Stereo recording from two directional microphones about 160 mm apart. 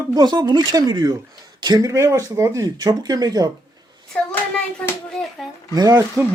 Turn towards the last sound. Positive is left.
turn(degrees=-20)  # may be behind; listen again after turning